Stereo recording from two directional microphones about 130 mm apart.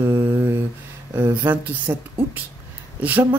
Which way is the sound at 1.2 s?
20° right (ahead or behind).